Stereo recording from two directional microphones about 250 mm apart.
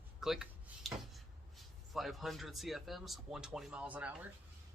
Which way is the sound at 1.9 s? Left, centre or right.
Centre.